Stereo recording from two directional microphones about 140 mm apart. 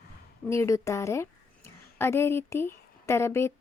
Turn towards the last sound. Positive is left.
turn(degrees=20)  # may be behind; listen again after turning